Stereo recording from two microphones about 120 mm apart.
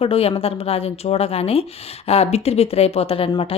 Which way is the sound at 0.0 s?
55° left (ahead or behind).